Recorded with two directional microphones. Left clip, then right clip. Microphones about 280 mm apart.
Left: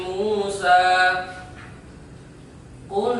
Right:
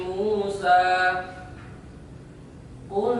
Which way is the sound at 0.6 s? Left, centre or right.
Centre.